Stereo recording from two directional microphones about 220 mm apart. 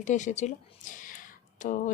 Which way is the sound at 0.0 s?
35° left (ahead or behind).